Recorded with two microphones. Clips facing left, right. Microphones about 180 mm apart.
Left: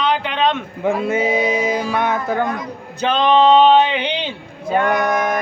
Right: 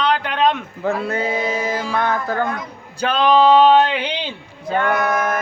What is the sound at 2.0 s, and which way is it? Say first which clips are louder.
Speech: left 1 dB; 20° left (ahead or behind).